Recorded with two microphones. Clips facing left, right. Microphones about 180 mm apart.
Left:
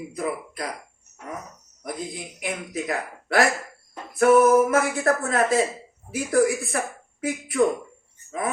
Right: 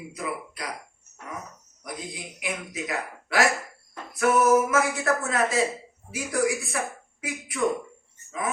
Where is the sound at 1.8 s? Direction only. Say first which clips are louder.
Left 4 dB; 50° left (ahead or behind).